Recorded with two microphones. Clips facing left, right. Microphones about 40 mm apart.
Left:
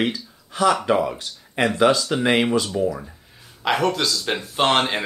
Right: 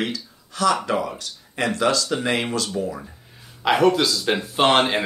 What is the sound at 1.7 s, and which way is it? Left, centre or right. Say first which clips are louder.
Speech: left 3 dB; centre.